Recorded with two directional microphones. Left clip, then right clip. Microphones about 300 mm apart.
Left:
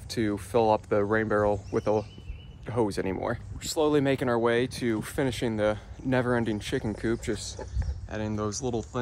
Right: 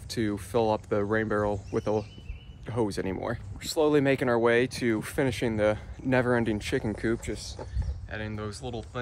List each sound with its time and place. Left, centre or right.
0.1 s speech: centre
7.2 s speech: left
8.1 s speech: centre